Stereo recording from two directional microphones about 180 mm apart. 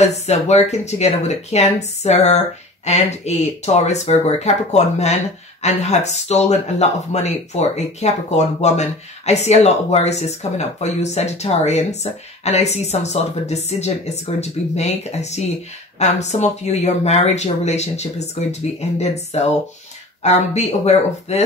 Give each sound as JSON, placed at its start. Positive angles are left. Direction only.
{"t": 0.0, "sound": "speech", "side_deg": 40}